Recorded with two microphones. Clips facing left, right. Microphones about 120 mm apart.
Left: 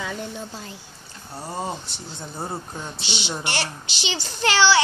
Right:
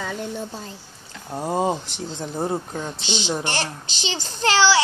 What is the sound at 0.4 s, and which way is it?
A woman's voice, 60° right (ahead or behind).